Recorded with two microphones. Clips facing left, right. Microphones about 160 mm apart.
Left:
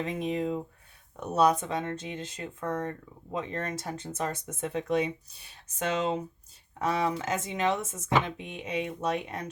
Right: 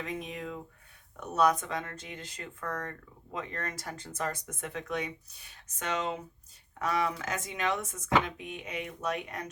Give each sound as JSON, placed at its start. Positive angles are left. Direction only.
{"t": 0.0, "sound": "speech", "side_deg": 30}
{"t": 6.7, "sound": "speech", "side_deg": 30}